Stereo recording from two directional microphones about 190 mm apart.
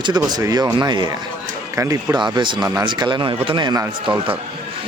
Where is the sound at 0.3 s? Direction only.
20° right (ahead or behind).